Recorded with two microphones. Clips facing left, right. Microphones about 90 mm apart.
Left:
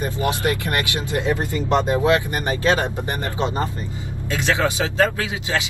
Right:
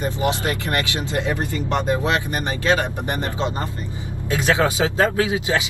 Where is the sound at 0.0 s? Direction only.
20° right (ahead or behind).